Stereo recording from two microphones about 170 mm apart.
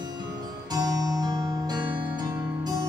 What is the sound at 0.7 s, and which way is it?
Music, 20° right (ahead or behind).